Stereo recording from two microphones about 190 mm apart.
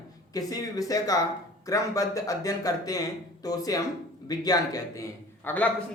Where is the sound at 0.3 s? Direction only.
20° left (ahead or behind).